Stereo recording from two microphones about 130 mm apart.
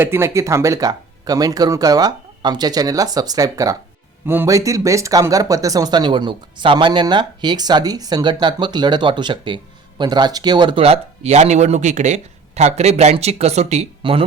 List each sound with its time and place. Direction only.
0.0 s speech: 20° right (ahead or behind); by 14.3 s 45° right (ahead or behind)